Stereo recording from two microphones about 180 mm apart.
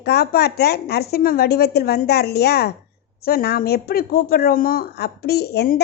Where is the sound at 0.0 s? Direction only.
65° left (ahead or behind).